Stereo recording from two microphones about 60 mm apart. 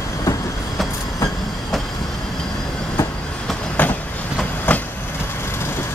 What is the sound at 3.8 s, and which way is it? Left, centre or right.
Train, left.